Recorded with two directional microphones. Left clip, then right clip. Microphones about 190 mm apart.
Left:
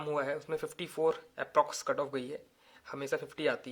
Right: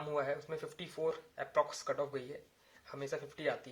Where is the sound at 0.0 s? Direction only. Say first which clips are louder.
Left 3 dB; 40° left (ahead or behind).